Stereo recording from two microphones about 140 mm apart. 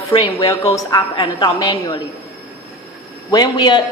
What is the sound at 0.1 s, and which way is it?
A woman's voice, 30° left (ahead or behind).